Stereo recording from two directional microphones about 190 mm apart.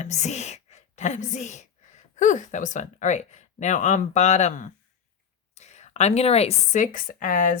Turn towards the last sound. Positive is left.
turn(degrees=40)  # may be behind; listen again after turning